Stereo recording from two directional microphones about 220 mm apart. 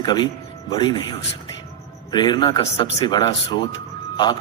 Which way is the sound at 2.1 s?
20° left (ahead or behind).